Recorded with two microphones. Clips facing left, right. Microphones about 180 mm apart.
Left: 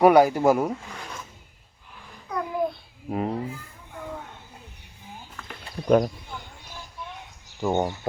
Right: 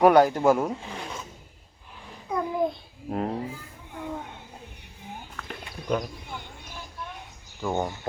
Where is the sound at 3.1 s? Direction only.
5° left (ahead or behind).